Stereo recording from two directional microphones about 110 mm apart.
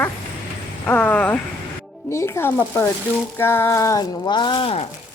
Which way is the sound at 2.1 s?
25° left (ahead or behind).